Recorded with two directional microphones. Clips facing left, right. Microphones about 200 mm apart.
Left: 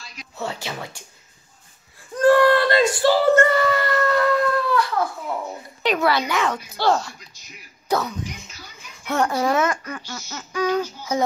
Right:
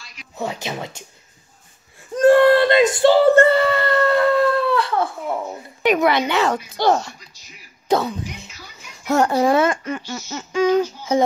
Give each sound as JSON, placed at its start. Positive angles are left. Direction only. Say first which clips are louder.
{"t": 0.4, "sound": "speech", "louder": "right 3 dB", "side_deg": -15}
{"t": 2.1, "sound": "a sound", "louder": "right 3 dB", "side_deg": -25}
{"t": 5.8, "sound": "speech", "louder": "right 4 dB", "side_deg": -15}
{"t": 8.9, "sound": "speech", "louder": "right 5 dB", "side_deg": -40}